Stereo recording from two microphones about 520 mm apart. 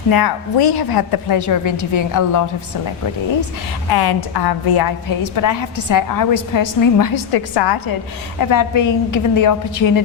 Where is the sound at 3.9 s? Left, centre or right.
Left.